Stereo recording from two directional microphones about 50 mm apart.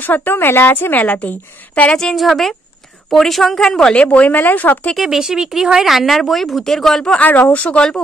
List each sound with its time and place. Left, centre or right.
0.0 s a woman's voice: left
2.1 s speech: centre
3.9 s a woman's voice: left
4.4 s a woman's voice: left
4.9 s speech: centre
7.2 s a woman's voice: left
7.6 s a woman's voice: left